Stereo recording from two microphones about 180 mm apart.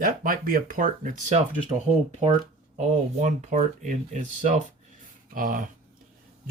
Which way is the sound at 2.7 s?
40° right (ahead or behind).